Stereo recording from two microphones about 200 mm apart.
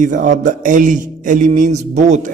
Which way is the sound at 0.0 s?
40° right (ahead or behind).